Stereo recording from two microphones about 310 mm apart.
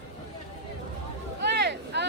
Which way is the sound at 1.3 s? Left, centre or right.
Right.